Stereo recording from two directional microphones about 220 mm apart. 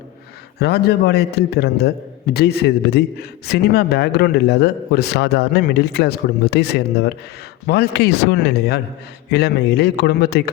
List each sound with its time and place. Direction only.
0.6 s a man's voice: 45° left (ahead or behind)